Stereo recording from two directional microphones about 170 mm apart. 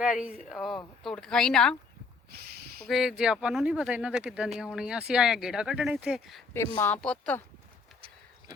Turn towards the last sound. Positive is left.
turn(degrees=5)  # may be behind; listen again after turning